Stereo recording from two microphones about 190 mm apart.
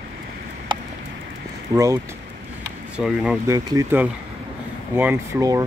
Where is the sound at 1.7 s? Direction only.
15° right (ahead or behind).